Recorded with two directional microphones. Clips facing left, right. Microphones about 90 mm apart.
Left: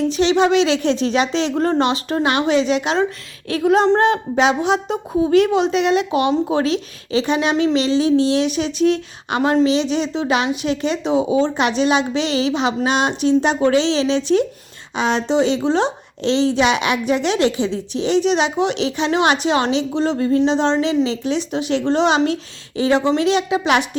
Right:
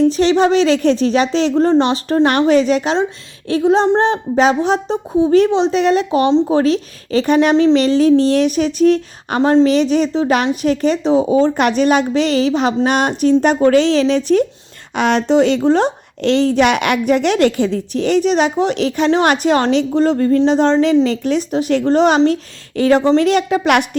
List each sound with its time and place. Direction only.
0.1 s a woman's voice: 40° right (ahead or behind)
2.2 s speech: 50° right (ahead or behind)
3.9 s a woman's voice: 30° right (ahead or behind); by 7.5 s 45° right (ahead or behind)
7.5 s a woman's voice: 35° right (ahead or behind)
7.8 s speech: 50° right (ahead or behind); by 9.6 s 35° right (ahead or behind)
9.6 s speech: 50° right (ahead or behind)
14.9 s speech: 60° right (ahead or behind)